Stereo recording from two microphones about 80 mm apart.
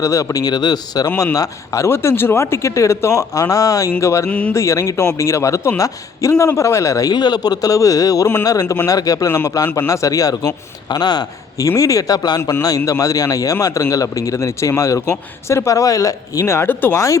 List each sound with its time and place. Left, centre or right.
0.0 s speech: left
0.5 s speech: left
1.0 s speech: left
4.3 s speech: centre
4.5 s speech: left
7.1 s speech: left
9.3 s speech: left
10.8 s speech: left
12.4 s speech: left
12.6 s speech: left
16.9 s speech: left